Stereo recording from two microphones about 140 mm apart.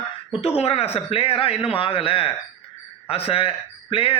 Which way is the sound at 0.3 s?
45° left (ahead or behind).